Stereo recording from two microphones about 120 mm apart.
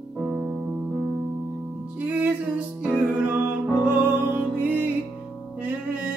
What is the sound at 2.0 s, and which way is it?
Music, 15° right (ahead or behind).